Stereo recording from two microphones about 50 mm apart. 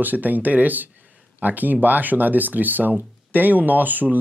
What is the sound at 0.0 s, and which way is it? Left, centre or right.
Speech, right.